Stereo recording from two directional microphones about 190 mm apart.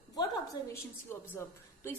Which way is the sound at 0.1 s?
20° left (ahead or behind).